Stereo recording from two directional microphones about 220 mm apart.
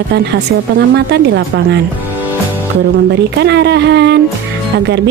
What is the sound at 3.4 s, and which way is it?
Speech, 50° right (ahead or behind).